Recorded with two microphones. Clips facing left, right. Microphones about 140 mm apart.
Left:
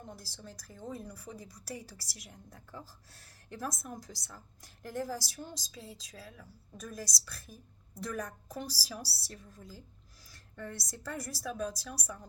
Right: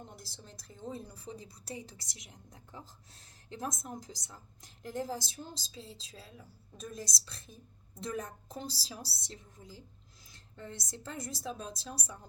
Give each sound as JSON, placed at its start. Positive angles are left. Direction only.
{"t": 0.3, "sound": "a woman's voice", "side_deg": -25}